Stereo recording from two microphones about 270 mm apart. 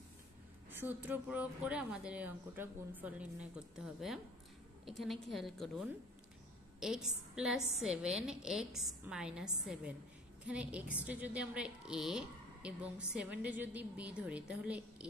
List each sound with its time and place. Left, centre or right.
0.7 s speech: centre